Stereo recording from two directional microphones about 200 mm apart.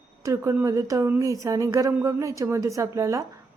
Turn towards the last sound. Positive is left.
turn(degrees=-15)  # may be behind; listen again after turning